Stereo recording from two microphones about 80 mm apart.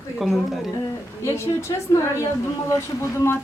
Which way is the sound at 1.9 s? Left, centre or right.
Left.